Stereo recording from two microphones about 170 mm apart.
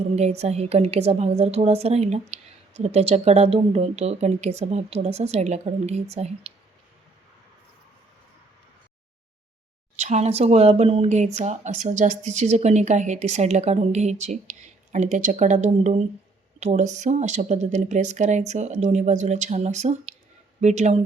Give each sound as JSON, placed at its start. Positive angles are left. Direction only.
{"t": 0.2, "sound": "speech", "side_deg": -40}
{"t": 10.0, "sound": "speech", "side_deg": -40}